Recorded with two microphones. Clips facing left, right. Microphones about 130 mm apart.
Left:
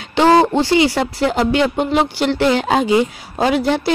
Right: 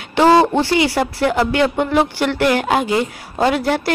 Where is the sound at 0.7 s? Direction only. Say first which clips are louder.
Left 2 dB; 20° left (ahead or behind).